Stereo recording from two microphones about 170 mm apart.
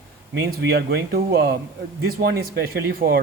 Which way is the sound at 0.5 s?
70° right (ahead or behind).